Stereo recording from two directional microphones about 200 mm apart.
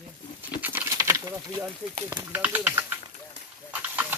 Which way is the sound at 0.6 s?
10° right (ahead or behind).